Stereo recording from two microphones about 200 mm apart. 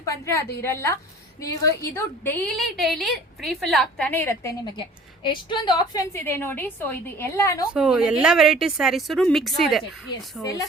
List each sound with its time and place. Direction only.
0.0 s a woman's voice: 15° left (ahead or behind)
2.6 s a woman's voice: centre (ahead or behind); by 6.0 s 25° left (ahead or behind)
6.1 s a woman's voice: 10° left (ahead or behind)
7.7 s a woman's voice: 5° right (ahead or behind)
10.4 s a woman's voice: 15° left (ahead or behind)